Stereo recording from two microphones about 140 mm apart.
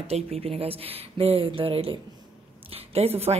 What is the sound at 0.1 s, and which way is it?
Speech, 45° right (ahead or behind).